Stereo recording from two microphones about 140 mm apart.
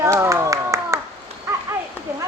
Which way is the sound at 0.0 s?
20° right (ahead or behind).